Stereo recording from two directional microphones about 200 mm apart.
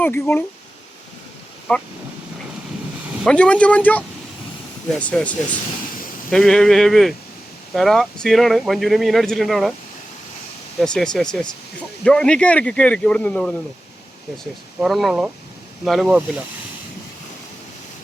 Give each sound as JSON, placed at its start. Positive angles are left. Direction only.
{"t": 0.0, "sound": "speech", "side_deg": 10}
{"t": 3.2, "sound": "speech", "side_deg": 5}
{"t": 6.3, "sound": "speech", "side_deg": 5}
{"t": 10.8, "sound": "speech", "side_deg": 5}
{"t": 14.8, "sound": "speech", "side_deg": 0}